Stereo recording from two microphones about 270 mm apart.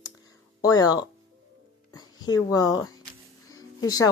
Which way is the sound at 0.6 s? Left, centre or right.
Centre.